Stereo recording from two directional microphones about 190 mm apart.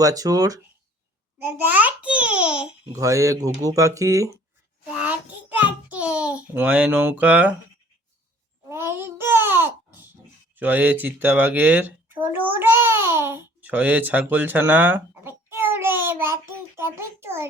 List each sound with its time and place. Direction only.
0.0 s a child's voice: 20° right (ahead or behind)
2.9 s a child's voice: 15° right (ahead or behind)
5.9 s a child's voice: 5° right (ahead or behind)
8.7 s babbling: 15° right (ahead or behind)
10.5 s speech: 10° right (ahead or behind)